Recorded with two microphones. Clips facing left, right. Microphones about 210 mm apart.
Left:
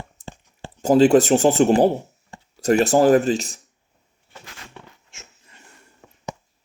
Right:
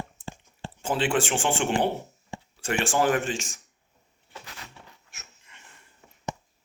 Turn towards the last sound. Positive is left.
turn(degrees=30)  # may be behind; listen again after turning